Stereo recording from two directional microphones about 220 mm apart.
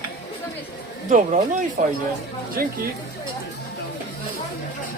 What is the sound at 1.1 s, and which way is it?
A woman's voice, 35° right (ahead or behind).